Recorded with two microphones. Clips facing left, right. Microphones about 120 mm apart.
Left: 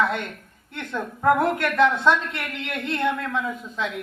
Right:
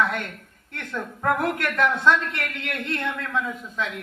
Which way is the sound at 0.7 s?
15° left (ahead or behind).